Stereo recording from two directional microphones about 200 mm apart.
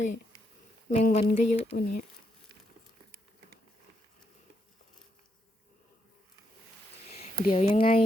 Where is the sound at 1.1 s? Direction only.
30° left (ahead or behind).